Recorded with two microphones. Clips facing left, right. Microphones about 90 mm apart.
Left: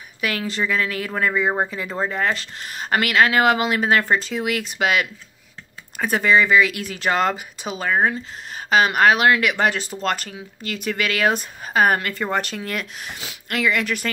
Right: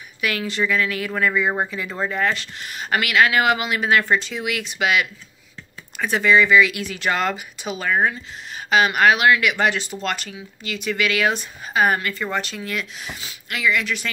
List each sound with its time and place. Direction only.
0.2 s speech: 35° left (ahead or behind)